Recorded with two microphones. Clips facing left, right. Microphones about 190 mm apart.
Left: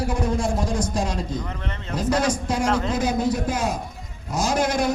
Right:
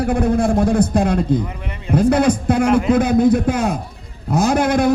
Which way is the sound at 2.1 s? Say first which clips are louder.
Right 4 dB; 60° right (ahead or behind).